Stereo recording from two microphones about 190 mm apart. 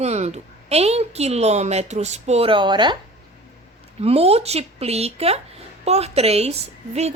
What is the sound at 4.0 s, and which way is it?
A woman's voice, 30° right (ahead or behind).